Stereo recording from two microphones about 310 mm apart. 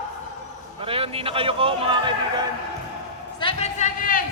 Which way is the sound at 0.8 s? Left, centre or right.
Centre.